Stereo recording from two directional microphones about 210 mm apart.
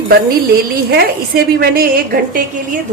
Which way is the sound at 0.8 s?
50° right (ahead or behind).